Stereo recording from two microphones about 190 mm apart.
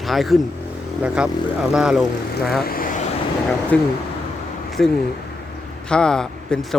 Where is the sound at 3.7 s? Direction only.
5° left (ahead or behind).